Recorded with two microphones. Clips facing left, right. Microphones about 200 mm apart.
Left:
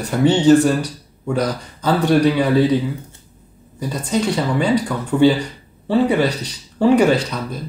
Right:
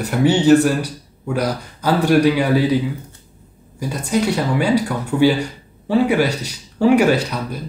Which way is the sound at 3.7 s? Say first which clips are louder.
Right 1 dB; 10° right (ahead or behind).